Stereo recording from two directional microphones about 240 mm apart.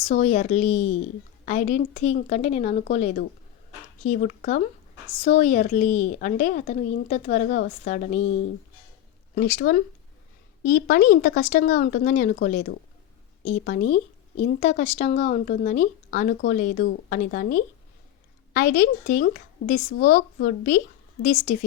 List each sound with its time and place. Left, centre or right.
0.0 s a woman's voice: left
9.3 s speech: left